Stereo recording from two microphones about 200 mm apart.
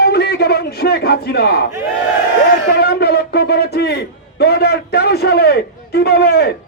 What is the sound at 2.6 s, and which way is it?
A man's voice, 55° left (ahead or behind).